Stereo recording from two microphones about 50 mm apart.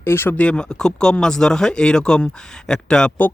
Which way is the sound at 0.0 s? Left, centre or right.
Left.